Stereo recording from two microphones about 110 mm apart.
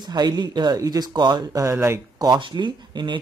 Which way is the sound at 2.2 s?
40° right (ahead or behind).